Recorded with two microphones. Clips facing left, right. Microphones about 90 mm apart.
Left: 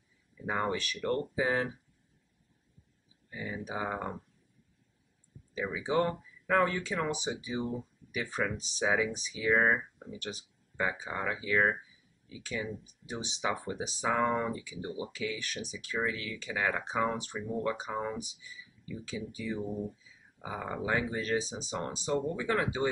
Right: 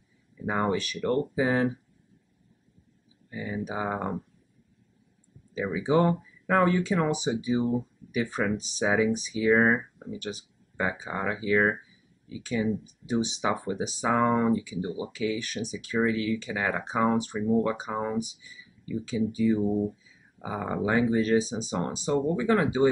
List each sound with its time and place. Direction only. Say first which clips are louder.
0.5 s speech: right 5 dB; 15° right (ahead or behind)
0.7 s speech: right 5 dB; 5° right (ahead or behind)
3.3 s speech: right 6 dB; 10° right (ahead or behind)
5.5 s speech: right 6 dB; 15° right (ahead or behind)
10.1 s speech: right 5 dB; 5° right (ahead or behind)
14.1 s speech: right 7 dB; 15° right (ahead or behind)
19.6 s speech: right 10 dB; 25° right (ahead or behind)